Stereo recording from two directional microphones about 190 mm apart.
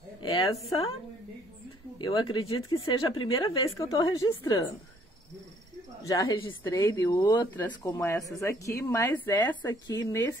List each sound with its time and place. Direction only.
0.2 s a woman's voice: 30° left (ahead or behind)
2.0 s a woman's voice: 25° left (ahead or behind)
6.0 s a woman's voice: 20° left (ahead or behind)